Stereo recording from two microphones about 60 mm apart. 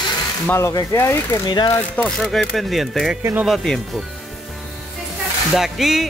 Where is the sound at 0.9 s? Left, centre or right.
Left.